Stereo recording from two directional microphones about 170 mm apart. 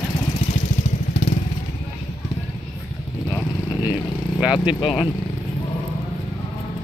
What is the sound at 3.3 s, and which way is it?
Vehicle, 25° left (ahead or behind).